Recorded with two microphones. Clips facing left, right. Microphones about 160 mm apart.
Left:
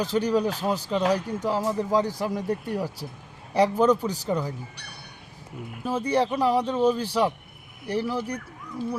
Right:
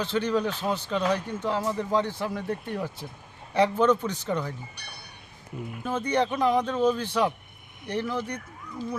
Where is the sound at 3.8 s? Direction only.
35° left (ahead or behind).